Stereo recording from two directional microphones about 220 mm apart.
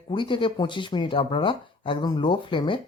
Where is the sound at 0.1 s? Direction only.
20° left (ahead or behind).